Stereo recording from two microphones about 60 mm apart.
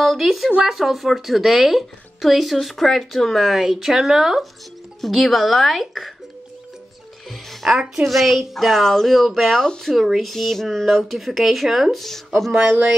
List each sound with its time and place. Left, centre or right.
0.0 s a woman's voice: centre
7.2 s a woman's voice: centre
12.5 s speech: right